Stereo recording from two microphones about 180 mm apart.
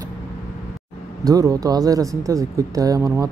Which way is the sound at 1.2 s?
20° right (ahead or behind).